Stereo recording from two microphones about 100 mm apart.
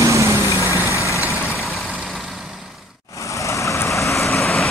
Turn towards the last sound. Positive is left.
turn(degrees=0)  # may be behind; listen again after turning